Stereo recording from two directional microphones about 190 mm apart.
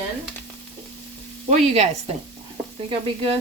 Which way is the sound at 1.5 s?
35° right (ahead or behind).